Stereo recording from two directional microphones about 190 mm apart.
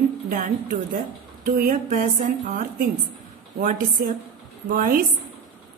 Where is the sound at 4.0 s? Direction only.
50° right (ahead or behind).